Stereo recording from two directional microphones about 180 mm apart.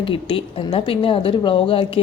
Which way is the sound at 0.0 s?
30° left (ahead or behind).